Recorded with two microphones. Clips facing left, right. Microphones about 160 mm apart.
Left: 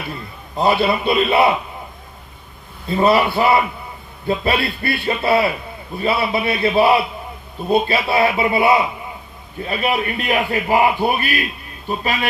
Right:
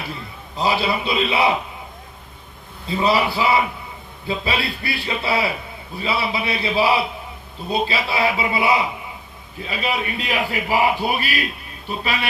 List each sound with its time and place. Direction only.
0.5 s a man's voice: 55° left (ahead or behind)
2.8 s a man's voice: 55° left (ahead or behind)